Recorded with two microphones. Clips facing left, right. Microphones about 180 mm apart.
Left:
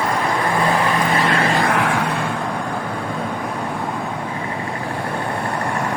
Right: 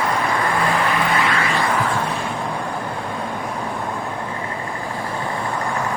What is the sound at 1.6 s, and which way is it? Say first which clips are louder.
Vehicle: left 2 dB; 70° left (ahead or behind).